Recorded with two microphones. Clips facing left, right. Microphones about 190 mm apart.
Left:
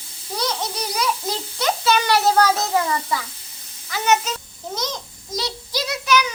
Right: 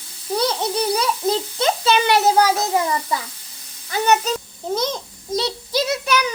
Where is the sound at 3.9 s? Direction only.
35° right (ahead or behind).